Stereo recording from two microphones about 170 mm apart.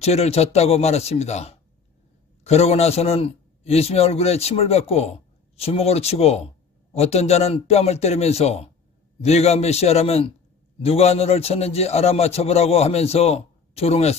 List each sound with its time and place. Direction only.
0.0 s a man's voice: 40° left (ahead or behind)